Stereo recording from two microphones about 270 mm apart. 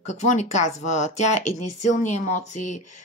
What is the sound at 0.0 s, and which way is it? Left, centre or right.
Speech, left.